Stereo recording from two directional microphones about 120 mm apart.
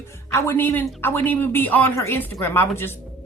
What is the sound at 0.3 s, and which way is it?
A woman's voice, 20° left (ahead or behind).